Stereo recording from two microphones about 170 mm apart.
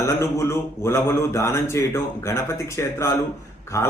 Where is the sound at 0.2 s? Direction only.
15° left (ahead or behind).